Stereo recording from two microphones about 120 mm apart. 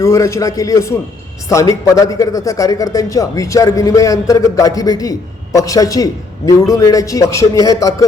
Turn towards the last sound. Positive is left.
turn(degrees=30)  # may be behind; listen again after turning